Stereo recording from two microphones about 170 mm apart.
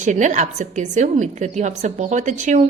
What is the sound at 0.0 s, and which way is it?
A woman's voice, 45° right (ahead or behind).